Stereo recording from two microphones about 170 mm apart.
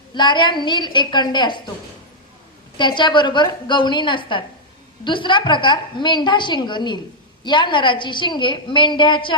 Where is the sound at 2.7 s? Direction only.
30° left (ahead or behind).